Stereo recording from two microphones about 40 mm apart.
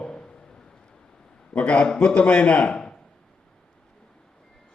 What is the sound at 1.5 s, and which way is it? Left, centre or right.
A man's voice, left.